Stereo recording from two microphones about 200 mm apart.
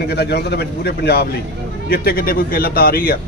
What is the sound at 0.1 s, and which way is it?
A man's voice, 55° left (ahead or behind).